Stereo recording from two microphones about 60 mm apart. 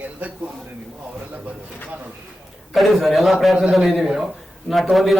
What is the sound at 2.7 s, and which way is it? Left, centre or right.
A man's voice, centre.